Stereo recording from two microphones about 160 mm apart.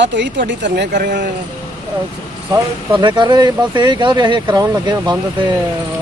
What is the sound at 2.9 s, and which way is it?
Speech, 30° right (ahead or behind).